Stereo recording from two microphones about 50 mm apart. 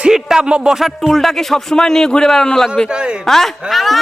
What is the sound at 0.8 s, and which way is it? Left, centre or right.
A man's voice, centre.